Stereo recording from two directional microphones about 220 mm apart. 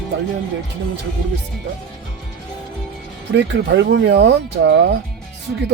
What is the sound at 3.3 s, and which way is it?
Speech, 55° right (ahead or behind).